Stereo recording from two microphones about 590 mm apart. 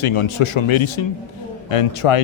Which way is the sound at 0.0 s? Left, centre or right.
Left.